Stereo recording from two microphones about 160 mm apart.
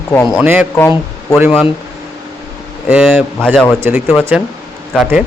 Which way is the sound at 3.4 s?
5° left (ahead or behind).